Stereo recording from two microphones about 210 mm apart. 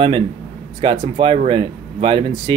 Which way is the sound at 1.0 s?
25° right (ahead or behind).